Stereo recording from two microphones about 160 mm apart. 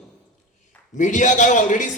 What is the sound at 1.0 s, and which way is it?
Speech, 50° left (ahead or behind).